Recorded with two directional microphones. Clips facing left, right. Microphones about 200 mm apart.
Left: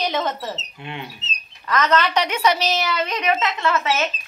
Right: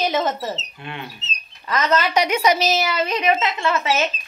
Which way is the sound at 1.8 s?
10° right (ahead or behind).